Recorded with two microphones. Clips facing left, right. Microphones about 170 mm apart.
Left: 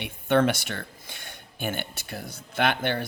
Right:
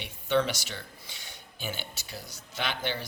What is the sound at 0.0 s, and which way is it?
Speech, 55° left (ahead or behind).